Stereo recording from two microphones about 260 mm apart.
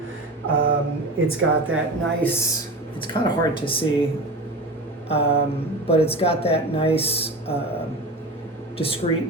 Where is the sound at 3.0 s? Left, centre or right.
Centre.